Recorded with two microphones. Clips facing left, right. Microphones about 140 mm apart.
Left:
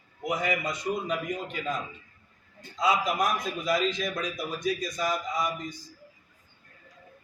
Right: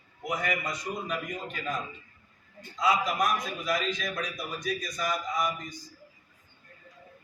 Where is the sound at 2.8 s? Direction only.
25° left (ahead or behind).